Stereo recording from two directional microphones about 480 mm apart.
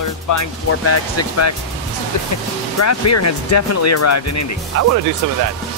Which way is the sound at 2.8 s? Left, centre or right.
Left.